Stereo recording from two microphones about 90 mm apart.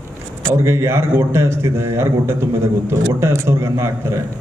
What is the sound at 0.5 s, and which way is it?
A man's voice, 30° right (ahead or behind).